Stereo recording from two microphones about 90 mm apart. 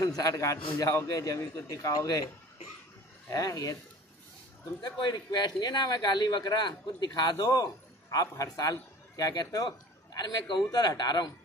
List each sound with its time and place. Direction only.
0.0 s a man's voice: 40° left (ahead or behind)
3.3 s a man's voice: 45° left (ahead or behind)
4.8 s a man's voice: 50° left (ahead or behind)